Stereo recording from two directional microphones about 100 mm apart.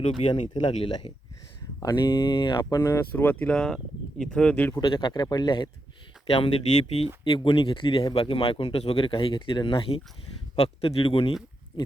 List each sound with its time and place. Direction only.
0.3 s speech: 60° left (ahead or behind)
1.8 s speech: 40° left (ahead or behind)
2.7 s speech: 30° left (ahead or behind)
3.2 s speech: 15° left (ahead or behind)
4.9 s speech: 50° left (ahead or behind)
6.2 s speech: 65° left (ahead or behind)
10.5 s a man's voice: 75° left (ahead or behind)